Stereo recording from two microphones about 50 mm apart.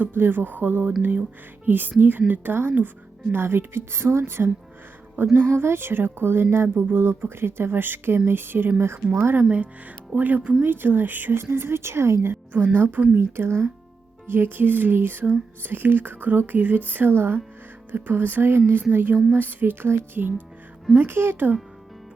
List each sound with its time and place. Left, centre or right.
0.0 s music: right
3.3 s speech: right
5.1 s speech: right
9.3 s music: right
10.6 s speech: right
14.3 s music: right
21.1 s speech: right